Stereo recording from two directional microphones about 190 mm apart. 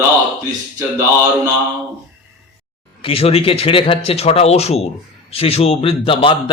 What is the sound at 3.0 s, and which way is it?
A man's voice, 30° left (ahead or behind).